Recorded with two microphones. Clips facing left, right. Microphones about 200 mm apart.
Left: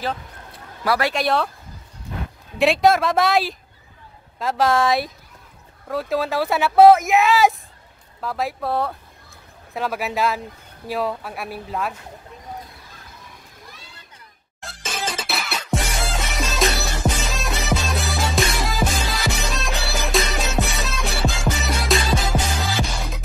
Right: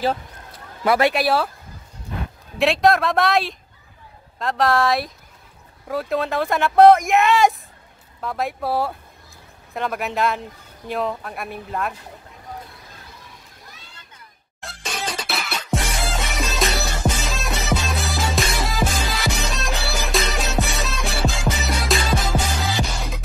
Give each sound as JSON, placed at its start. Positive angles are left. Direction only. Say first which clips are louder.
{"t": 0.8, "sound": "speech", "louder": "right 4 dB", "side_deg": -20}
{"t": 1.1, "sound": "speech", "louder": "right 1 dB", "side_deg": -5}
{"t": 2.6, "sound": "speech", "louder": "left 1 dB", "side_deg": 0}
{"t": 14.6, "sound": "music", "louder": "left 1 dB", "side_deg": 0}